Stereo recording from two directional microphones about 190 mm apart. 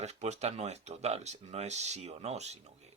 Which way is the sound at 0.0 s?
35° right (ahead or behind).